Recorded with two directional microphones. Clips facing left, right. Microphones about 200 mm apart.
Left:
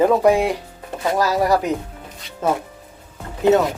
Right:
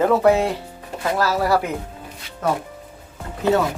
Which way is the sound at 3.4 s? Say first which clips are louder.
Left 4 dB; 20° left (ahead or behind).